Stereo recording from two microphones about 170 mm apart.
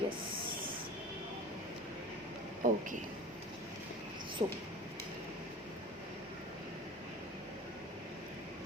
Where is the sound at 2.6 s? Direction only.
50° right (ahead or behind).